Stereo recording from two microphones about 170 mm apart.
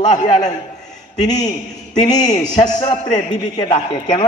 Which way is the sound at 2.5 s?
45° left (ahead or behind).